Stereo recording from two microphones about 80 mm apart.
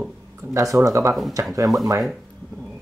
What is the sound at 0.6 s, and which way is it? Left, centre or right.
Speech, right.